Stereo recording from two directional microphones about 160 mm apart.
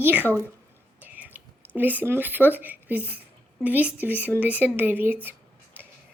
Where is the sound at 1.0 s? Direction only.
10° right (ahead or behind).